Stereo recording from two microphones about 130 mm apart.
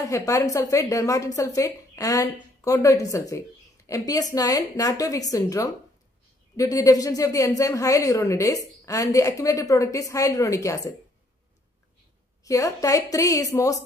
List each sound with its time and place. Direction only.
0.0 s a woman's voice: 25° left (ahead or behind)
12.4 s a woman's voice: 25° left (ahead or behind)